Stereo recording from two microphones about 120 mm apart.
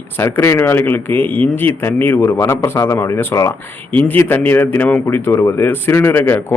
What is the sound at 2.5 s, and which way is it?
Speech, 30° left (ahead or behind).